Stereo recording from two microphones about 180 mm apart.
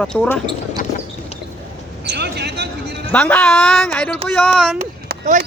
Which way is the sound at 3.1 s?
10° left (ahead or behind).